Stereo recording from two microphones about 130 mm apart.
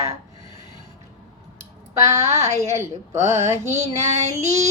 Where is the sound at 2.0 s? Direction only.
25° right (ahead or behind).